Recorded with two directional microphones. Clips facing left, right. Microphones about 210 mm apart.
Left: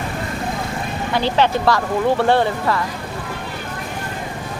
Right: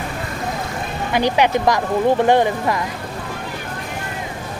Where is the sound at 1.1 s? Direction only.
15° right (ahead or behind).